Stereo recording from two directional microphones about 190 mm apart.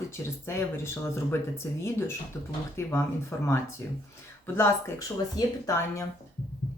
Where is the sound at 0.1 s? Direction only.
15° left (ahead or behind).